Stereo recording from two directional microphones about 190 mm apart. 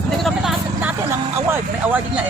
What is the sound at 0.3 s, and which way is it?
Vehicle, 5° right (ahead or behind).